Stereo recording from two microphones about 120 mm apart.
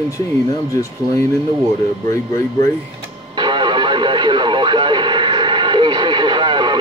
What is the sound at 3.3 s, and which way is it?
Radio, 40° right (ahead or behind).